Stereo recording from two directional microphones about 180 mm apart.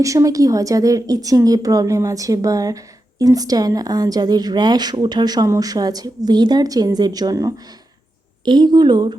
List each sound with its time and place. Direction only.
0.0 s a woman's voice: 20° right (ahead or behind)